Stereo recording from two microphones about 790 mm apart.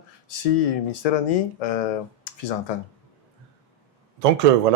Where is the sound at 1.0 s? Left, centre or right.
Left.